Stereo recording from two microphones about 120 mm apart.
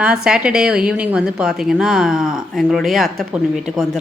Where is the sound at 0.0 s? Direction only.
10° right (ahead or behind).